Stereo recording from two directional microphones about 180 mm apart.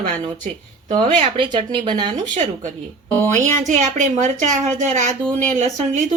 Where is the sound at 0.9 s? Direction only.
25° right (ahead or behind).